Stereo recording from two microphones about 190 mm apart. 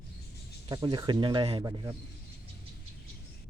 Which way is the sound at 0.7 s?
20° right (ahead or behind).